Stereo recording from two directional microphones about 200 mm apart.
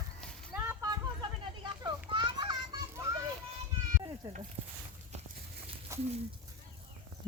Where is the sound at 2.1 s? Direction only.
20° right (ahead or behind).